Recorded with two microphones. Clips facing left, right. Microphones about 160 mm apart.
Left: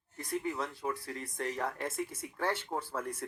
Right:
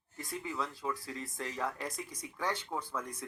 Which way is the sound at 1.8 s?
25° left (ahead or behind).